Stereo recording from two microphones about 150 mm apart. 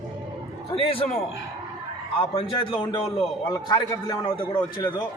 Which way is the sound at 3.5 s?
20° left (ahead or behind).